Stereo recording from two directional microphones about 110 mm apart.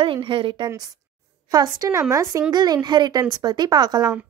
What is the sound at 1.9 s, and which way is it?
Speech, 25° right (ahead or behind).